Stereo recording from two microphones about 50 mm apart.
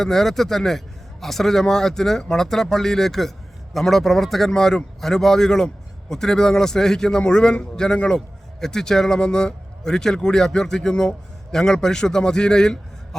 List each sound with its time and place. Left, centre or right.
0.0 s a man's voice: centre
7.2 s a man's voice: left